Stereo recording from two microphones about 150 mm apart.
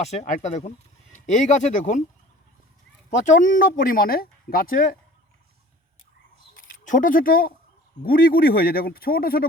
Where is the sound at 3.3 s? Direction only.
65° left (ahead or behind).